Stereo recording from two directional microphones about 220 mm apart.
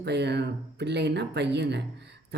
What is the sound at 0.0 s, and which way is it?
Speech, 50° right (ahead or behind).